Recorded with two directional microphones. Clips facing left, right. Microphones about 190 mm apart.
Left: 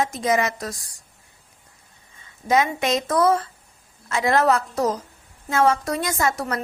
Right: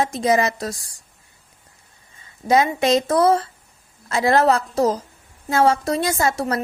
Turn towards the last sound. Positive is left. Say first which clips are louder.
# right 3 dB
turn(degrees=-30)  # may be behind; listen again after turning